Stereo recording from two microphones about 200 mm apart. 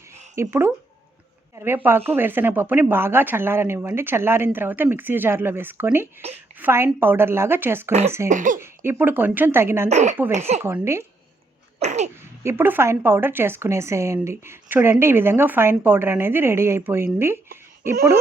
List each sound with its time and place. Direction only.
0.4 s speech: 15° right (ahead or behind)
1.5 s speech: 10° right (ahead or behind)
8.3 s sneeze: 40° right (ahead or behind)
8.5 s speech: 10° right (ahead or behind)
9.9 s sneeze: 35° right (ahead or behind)
10.6 s speech: 10° right (ahead or behind)
11.8 s sneeze: 35° right (ahead or behind)
12.1 s speech: 15° right (ahead or behind)
17.2 s a sound: 10° right (ahead or behind)